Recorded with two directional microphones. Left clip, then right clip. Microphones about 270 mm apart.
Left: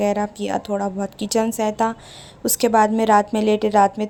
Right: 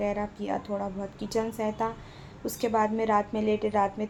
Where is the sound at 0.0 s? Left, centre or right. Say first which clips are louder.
Left 9 dB; left.